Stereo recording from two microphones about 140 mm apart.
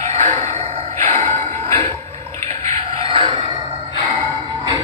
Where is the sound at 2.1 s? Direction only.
20° left (ahead or behind).